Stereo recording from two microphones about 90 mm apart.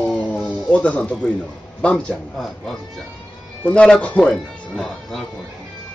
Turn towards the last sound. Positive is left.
turn(degrees=5)  # may be behind; listen again after turning